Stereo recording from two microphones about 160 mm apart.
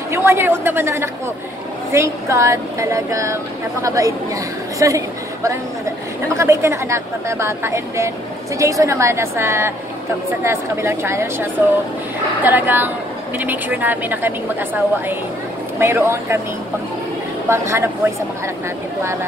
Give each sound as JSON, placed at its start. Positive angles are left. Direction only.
{"t": 0.1, "sound": "a woman's voice", "side_deg": -15}
{"t": 12.4, "sound": "a woman's voice", "side_deg": -10}
{"t": 17.5, "sound": "a woman's voice", "side_deg": -15}